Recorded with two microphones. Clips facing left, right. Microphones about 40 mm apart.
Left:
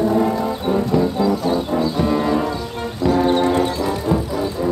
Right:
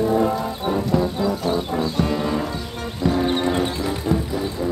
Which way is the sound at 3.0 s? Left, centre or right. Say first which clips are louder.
Left 4 dB; centre.